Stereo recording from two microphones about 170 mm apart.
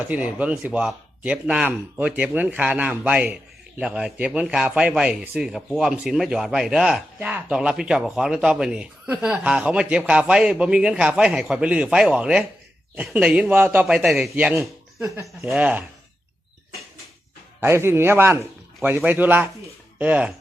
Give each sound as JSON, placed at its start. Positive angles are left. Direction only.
{"t": 0.0, "sound": "speech", "side_deg": -10}
{"t": 15.0, "sound": "speech", "side_deg": -15}
{"t": 17.6, "sound": "speech", "side_deg": -15}